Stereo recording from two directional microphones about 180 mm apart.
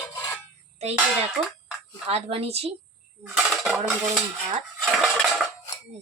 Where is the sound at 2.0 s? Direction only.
35° right (ahead or behind).